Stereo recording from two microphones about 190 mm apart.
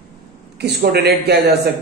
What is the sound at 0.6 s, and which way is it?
A man's voice, 60° right (ahead or behind).